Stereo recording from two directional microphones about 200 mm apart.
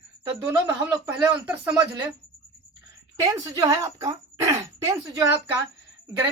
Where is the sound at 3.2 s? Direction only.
15° right (ahead or behind).